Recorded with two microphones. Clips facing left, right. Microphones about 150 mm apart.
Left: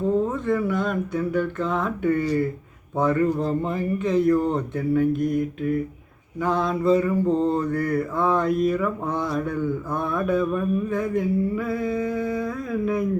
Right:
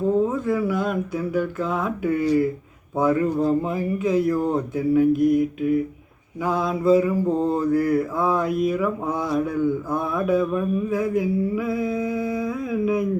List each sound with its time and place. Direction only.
0.2 s mantra: 5° right (ahead or behind)
3.0 s speech: 5° right (ahead or behind)
6.4 s mantra: 5° right (ahead or behind)